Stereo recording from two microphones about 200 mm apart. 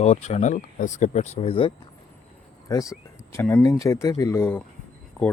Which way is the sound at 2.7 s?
15° left (ahead or behind).